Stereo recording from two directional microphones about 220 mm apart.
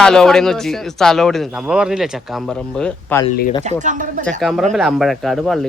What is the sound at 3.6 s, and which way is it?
Speech, 35° right (ahead or behind).